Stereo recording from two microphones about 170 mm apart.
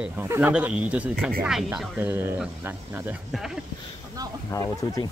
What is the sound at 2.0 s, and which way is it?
Speech, 10° right (ahead or behind).